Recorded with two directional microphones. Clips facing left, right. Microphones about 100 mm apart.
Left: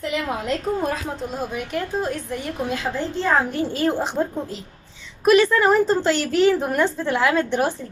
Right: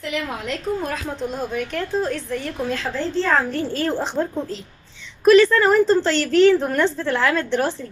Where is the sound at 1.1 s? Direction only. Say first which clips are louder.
Right 2 dB; 5° left (ahead or behind).